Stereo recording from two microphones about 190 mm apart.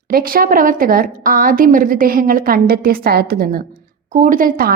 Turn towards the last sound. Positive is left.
turn(degrees=-50)  # may be behind; listen again after turning